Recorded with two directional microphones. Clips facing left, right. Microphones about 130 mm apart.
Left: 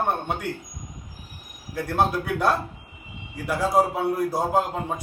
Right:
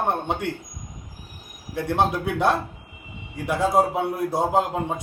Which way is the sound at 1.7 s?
25° right (ahead or behind).